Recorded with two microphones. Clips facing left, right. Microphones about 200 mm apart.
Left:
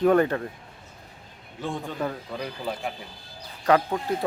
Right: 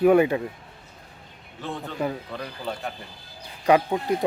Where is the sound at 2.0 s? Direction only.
10° right (ahead or behind).